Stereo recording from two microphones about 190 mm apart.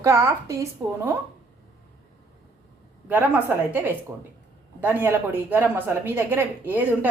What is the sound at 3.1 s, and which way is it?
Speech, 10° right (ahead or behind).